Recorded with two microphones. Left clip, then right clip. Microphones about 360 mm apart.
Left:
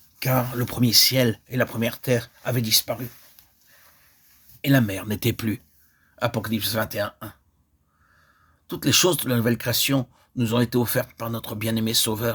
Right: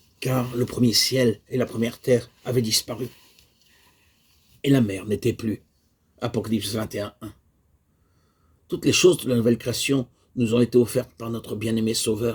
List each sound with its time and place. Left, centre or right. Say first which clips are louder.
0.2 s speech: left 1 dB; left
4.6 s speech: even; left
8.6 s speech: right 2 dB; left